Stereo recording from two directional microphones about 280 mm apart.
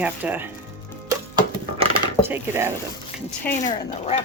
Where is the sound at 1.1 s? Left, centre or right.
Centre.